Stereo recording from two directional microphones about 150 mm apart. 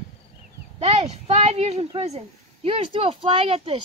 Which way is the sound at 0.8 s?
45° right (ahead or behind).